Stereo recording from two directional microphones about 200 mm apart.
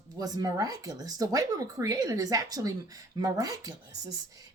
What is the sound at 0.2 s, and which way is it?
Speech, 20° right (ahead or behind).